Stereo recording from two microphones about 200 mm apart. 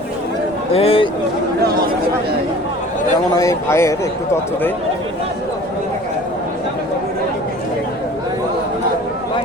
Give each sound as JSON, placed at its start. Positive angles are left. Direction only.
{"t": 0.7, "sound": "a man's voice", "side_deg": 30}
{"t": 3.3, "sound": "speech", "side_deg": 15}